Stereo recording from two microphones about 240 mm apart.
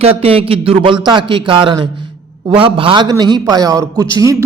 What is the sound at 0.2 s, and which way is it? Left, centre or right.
A man's voice, right.